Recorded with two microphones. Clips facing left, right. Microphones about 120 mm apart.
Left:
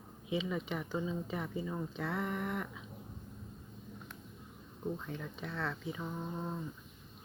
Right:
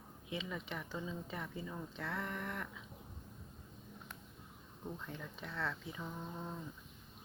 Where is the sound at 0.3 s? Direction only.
15° left (ahead or behind).